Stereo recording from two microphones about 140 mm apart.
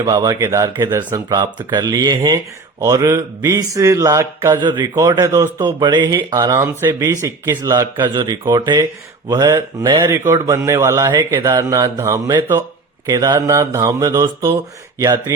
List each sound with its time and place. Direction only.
0.0 s speech: 25° right (ahead or behind)
4.6 s speech: 30° right (ahead or behind)
4.9 s speech: 20° right (ahead or behind)
5.5 s speech: 30° right (ahead or behind)
6.5 s speech: 20° right (ahead or behind)
11.0 s speech: 30° right (ahead or behind)